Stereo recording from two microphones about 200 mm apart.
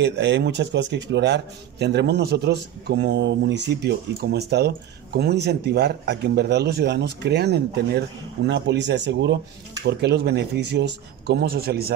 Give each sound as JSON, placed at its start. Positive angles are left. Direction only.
{"t": 0.0, "sound": "speech", "side_deg": -60}